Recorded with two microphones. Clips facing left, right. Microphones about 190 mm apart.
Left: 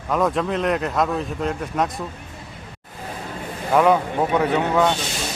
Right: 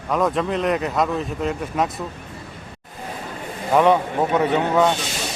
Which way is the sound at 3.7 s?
Centre (ahead or behind).